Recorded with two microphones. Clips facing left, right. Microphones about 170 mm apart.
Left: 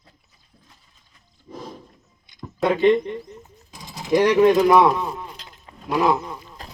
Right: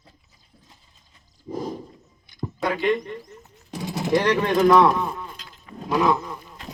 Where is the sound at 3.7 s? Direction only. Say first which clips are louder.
Right 10 dB; 65° right (ahead or behind).